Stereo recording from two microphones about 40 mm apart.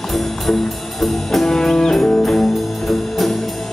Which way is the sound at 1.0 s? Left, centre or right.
Centre.